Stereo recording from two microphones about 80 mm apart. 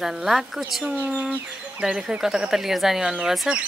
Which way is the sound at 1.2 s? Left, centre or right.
Centre.